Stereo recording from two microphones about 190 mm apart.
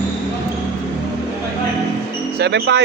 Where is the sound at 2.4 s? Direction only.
65° right (ahead or behind).